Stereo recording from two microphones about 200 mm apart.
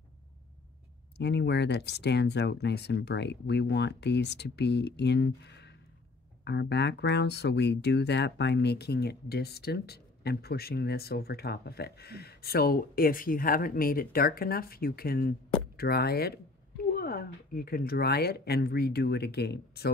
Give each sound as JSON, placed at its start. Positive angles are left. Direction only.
{"t": 1.1, "sound": "speech", "side_deg": 60}